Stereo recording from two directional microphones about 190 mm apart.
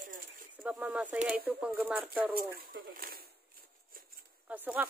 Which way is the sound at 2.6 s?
50° right (ahead or behind).